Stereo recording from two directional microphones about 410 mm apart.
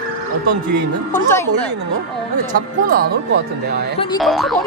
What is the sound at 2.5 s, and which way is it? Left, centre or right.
Speech, right.